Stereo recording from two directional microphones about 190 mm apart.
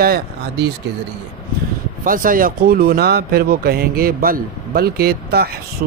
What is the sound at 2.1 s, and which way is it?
Speech, 45° right (ahead or behind).